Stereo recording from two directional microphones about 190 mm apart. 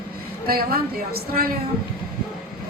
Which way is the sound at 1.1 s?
55° right (ahead or behind).